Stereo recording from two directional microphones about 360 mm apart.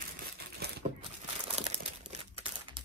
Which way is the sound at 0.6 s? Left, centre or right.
Right.